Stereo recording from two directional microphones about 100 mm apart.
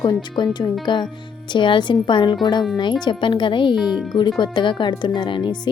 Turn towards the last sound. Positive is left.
turn(degrees=50)  # may be behind; listen again after turning